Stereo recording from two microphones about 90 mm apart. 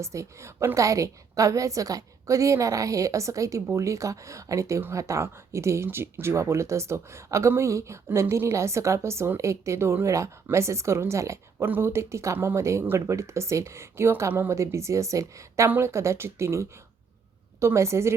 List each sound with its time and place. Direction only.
0.0 s speech: 35° right (ahead or behind)